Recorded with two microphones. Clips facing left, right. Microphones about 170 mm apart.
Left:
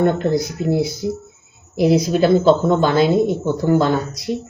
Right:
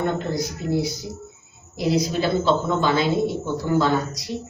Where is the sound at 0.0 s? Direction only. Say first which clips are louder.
Left 7 dB; 55° left (ahead or behind).